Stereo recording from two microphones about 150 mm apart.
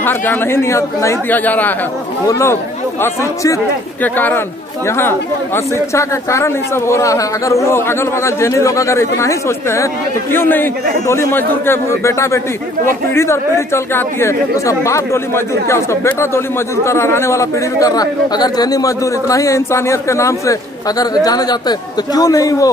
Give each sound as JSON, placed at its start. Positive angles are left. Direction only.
{"t": 0.0, "sound": "speech", "side_deg": 15}